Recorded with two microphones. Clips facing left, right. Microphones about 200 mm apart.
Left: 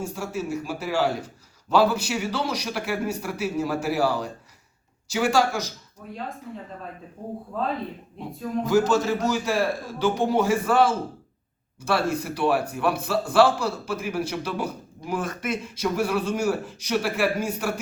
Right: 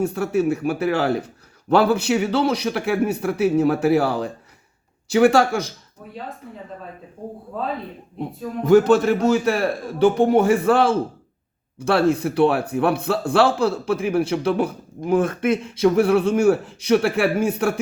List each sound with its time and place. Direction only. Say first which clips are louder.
0.0 s speech: right 10 dB; 60° right (ahead or behind)
8.6 s speech: right 7 dB; 60° right (ahead or behind)